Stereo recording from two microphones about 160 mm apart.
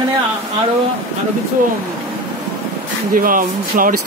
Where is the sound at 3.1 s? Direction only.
60° right (ahead or behind).